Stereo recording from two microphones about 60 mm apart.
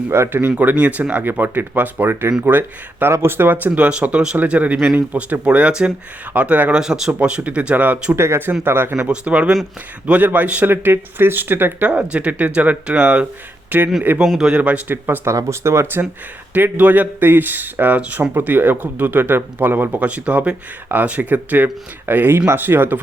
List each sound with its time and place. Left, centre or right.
0.1 s speech: right
3.8 s speech: right
6.7 s speech: centre; by 8.1 s right
8.1 s speech: right
9.0 s speech: centre; by 11.9 s right
12.1 s speech: right
14.3 s speech: centre
15.4 s speech: right
16.6 s speech: right